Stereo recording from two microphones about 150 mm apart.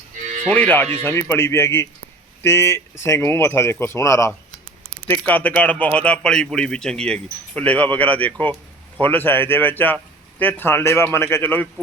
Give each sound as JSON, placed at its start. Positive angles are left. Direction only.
{"t": 0.5, "sound": "a man's voice", "side_deg": 10}